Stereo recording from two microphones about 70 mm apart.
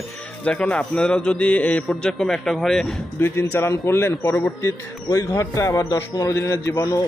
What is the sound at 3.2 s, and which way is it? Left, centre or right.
Speech, left.